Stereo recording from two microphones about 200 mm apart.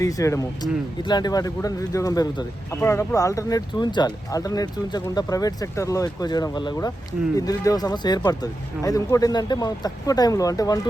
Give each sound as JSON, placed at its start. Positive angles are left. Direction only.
{"t": 0.0, "sound": "speech", "side_deg": 15}